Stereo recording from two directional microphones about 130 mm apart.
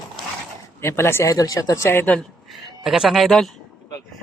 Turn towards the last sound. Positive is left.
turn(degrees=0)  # may be behind; listen again after turning